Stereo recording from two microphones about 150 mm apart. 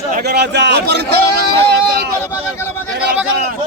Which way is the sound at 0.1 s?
90° right.